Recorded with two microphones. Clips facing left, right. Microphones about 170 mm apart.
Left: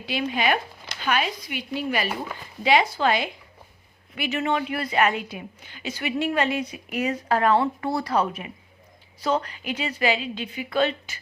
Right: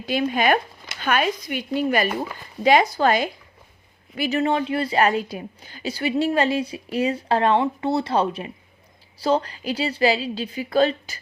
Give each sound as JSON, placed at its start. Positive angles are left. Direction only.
{"t": 0.0, "sound": "a woman's voice", "side_deg": -45}